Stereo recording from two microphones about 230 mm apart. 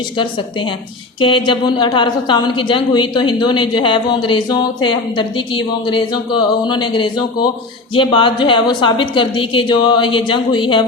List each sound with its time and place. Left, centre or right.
0.2 s a woman's voice: left